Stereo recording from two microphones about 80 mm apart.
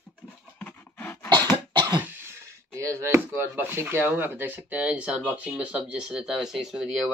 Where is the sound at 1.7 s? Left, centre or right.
Right.